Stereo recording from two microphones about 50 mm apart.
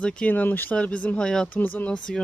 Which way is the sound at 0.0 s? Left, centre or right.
Left.